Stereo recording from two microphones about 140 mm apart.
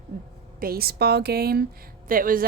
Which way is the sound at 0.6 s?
90° right.